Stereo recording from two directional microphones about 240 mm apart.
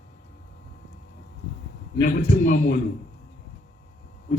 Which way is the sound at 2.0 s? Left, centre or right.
Left.